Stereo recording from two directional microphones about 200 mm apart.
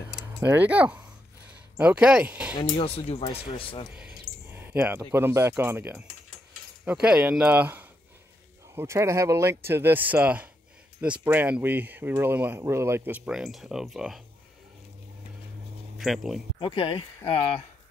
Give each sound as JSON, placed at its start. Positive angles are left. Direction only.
{"t": 0.4, "sound": "speech", "side_deg": -10}
{"t": 2.8, "sound": "speech", "side_deg": 30}
{"t": 3.9, "sound": "a sound", "side_deg": -5}
{"t": 4.5, "sound": "speech", "side_deg": -10}
{"t": 16.0, "sound": "speech", "side_deg": 0}
{"t": 16.5, "sound": "speech", "side_deg": 25}